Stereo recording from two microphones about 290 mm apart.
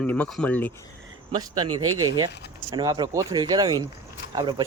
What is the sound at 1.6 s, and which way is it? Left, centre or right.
Speech, right.